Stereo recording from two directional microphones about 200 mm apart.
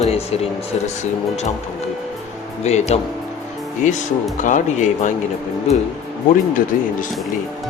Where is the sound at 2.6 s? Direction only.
35° left (ahead or behind).